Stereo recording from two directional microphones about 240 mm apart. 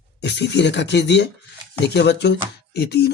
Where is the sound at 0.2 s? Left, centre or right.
Left.